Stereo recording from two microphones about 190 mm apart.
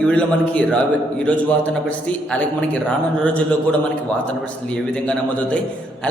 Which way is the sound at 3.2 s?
5° left (ahead or behind).